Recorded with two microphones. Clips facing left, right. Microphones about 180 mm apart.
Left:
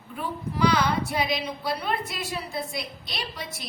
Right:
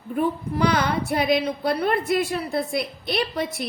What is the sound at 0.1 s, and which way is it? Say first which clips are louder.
A woman's voice: right 9 dB; 55° right (ahead or behind).